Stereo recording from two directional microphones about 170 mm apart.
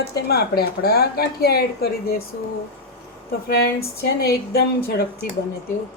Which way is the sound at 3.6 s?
65° left (ahead or behind).